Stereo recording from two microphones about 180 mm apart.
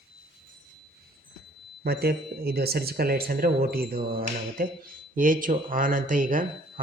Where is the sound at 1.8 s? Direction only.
60° right (ahead or behind).